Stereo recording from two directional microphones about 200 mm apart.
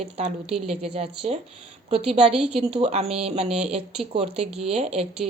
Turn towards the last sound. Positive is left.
turn(degrees=-30)  # may be behind; listen again after turning